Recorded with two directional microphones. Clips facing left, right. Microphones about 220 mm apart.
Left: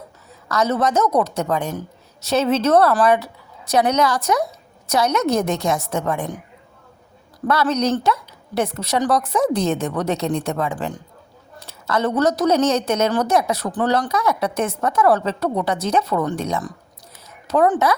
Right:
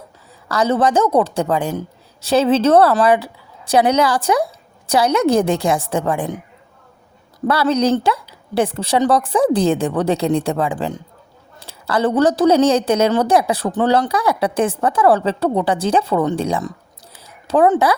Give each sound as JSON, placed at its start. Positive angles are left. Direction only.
{"t": 0.4, "sound": "a woman's voice", "side_deg": -30}
{"t": 7.4, "sound": "a woman's voice", "side_deg": -30}